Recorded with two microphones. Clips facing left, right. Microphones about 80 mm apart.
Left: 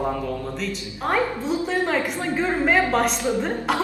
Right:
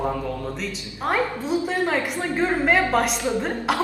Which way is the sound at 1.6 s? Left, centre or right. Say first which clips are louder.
Even; centre.